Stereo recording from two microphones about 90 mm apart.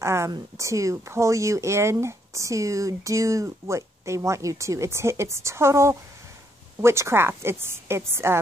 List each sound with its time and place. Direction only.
0.0 s a woman's voice: 30° right (ahead or behind)